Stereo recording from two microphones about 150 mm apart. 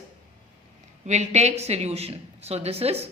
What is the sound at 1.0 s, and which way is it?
A woman's voice, 50° right (ahead or behind).